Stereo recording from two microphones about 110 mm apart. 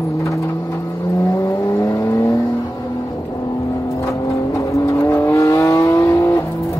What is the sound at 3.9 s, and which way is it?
Vehicle, 30° left (ahead or behind).